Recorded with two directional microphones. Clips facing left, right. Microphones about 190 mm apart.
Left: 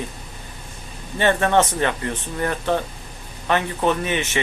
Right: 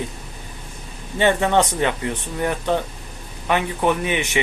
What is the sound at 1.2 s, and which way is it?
Speech, 15° right (ahead or behind).